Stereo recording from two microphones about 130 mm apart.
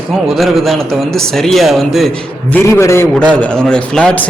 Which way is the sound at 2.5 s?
20° left (ahead or behind).